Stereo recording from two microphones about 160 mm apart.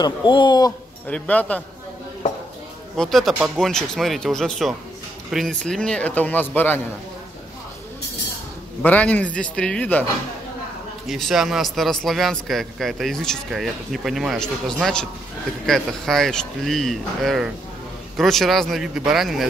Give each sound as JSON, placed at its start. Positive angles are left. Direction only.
{"t": 0.0, "sound": "a man's voice", "side_deg": 30}
{"t": 1.0, "sound": "a man's voice", "side_deg": 10}
{"t": 3.0, "sound": "a man's voice", "side_deg": 0}
{"t": 8.8, "sound": "a man's voice", "side_deg": 10}
{"t": 11.1, "sound": "a man's voice", "side_deg": 0}